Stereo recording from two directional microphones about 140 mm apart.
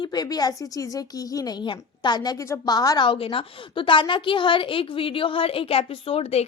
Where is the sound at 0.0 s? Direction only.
30° left (ahead or behind).